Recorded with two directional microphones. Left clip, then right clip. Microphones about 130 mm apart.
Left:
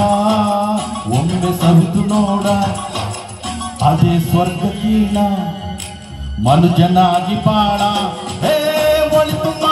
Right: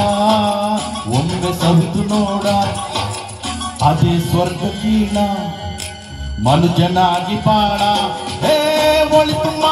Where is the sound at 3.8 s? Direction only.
40° left (ahead or behind).